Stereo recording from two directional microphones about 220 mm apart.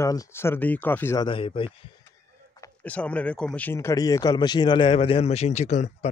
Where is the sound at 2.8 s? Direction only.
5° left (ahead or behind); by 5.9 s 30° left (ahead or behind).